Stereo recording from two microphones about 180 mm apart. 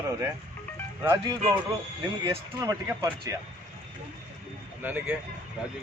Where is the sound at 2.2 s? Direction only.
20° right (ahead or behind).